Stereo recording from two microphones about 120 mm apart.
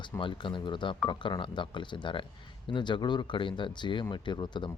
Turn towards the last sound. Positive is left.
turn(degrees=40)  # may be behind; listen again after turning